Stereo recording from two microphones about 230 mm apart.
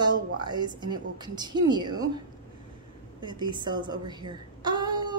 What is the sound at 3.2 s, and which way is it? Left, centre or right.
A woman's voice, centre.